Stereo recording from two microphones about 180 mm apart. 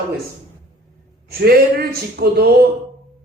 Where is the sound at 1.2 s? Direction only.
60° right (ahead or behind).